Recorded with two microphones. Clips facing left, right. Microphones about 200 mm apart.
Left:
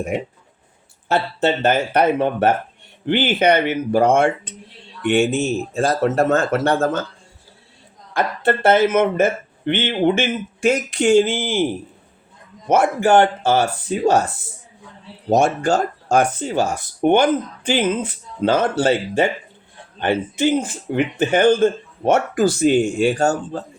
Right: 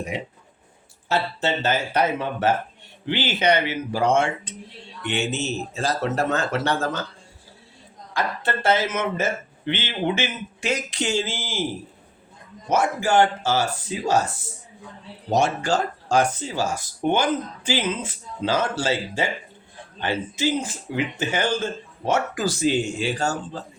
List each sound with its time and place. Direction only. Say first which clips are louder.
0.1 s speech: left 7 dB; 50° left (ahead or behind)
8.1 s speech: left 7 dB; 55° left (ahead or behind)
12.6 s speech: left 6 dB; 60° left (ahead or behind)
15.3 s speech: left 5 dB; 50° left (ahead or behind)